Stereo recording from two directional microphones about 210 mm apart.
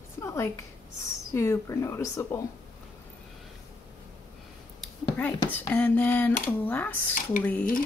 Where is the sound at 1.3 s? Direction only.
15° left (ahead or behind).